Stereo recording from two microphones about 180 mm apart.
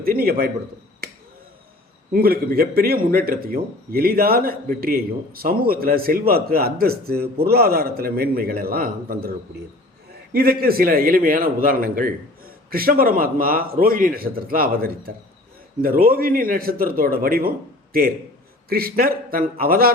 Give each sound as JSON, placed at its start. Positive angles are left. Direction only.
{"t": 0.0, "sound": "a man's voice", "side_deg": -55}
{"t": 2.1, "sound": "a man's voice", "side_deg": -55}
{"t": 10.3, "sound": "a man's voice", "side_deg": -55}